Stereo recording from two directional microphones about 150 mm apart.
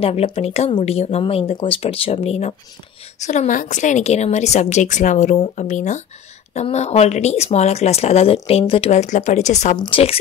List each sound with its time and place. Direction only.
0.0 s speech: 40° left (ahead or behind)
9.8 s speech: 35° left (ahead or behind)